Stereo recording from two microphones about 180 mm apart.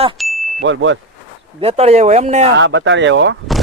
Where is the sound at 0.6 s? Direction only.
90° right.